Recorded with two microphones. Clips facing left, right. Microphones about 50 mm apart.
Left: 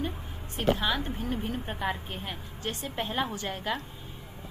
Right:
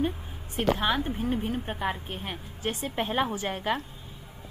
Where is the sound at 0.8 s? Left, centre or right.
Right.